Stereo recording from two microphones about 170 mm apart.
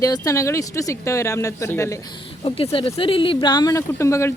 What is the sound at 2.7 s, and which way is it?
Speech, 30° left (ahead or behind).